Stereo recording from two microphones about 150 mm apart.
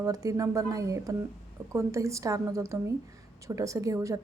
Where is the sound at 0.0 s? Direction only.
25° right (ahead or behind).